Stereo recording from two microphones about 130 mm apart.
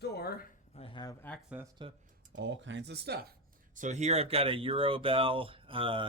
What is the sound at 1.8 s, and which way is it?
Speech, 40° right (ahead or behind).